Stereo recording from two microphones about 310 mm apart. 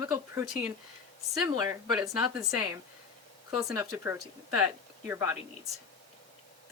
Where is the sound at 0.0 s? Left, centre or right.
Centre.